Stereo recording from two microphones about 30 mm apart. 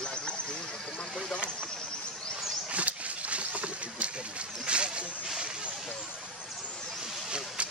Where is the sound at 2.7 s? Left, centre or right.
Right.